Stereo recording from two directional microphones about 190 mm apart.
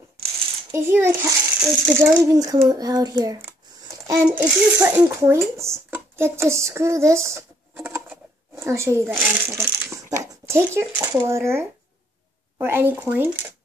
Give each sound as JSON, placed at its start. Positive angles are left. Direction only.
{"t": 0.7, "sound": "a child's voice", "side_deg": -10}
{"t": 5.6, "sound": "a sound", "side_deg": -15}
{"t": 10.1, "sound": "speech", "side_deg": -15}